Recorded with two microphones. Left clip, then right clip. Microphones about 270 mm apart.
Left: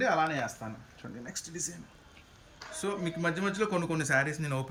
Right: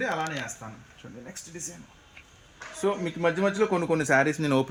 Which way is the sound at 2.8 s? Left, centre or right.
Centre.